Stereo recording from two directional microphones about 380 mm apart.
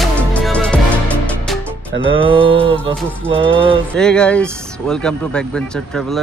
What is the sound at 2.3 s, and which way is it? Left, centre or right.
Mantra, centre.